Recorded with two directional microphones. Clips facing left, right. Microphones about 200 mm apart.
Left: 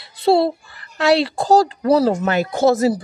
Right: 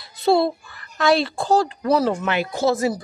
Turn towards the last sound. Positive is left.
turn(degrees=30)  # may be behind; listen again after turning